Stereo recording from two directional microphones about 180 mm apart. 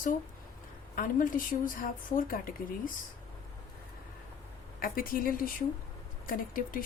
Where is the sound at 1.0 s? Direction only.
50° left (ahead or behind).